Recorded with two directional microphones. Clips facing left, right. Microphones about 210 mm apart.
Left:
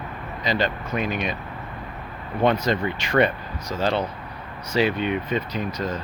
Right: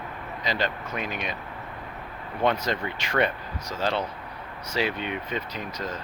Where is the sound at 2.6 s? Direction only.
5° right (ahead or behind).